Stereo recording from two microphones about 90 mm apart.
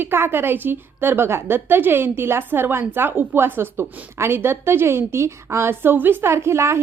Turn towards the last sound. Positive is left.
turn(degrees=-30)  # may be behind; listen again after turning